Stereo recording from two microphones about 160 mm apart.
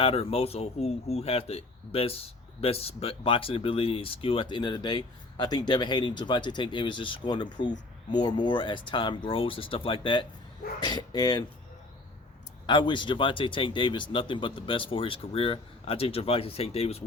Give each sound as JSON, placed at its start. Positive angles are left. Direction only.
{"t": 0.0, "sound": "speech", "side_deg": 35}
{"t": 12.6, "sound": "speech", "side_deg": 30}